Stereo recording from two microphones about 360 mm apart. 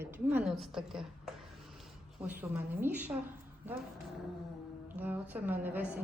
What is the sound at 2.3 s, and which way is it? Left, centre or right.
Speech, centre.